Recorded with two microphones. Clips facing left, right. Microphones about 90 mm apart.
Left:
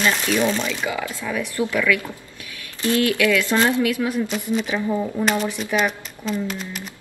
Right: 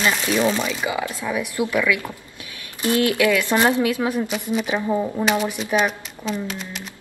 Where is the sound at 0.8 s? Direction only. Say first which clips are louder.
Right 1 dB; 20° right (ahead or behind); by 6.8 s centre (ahead or behind).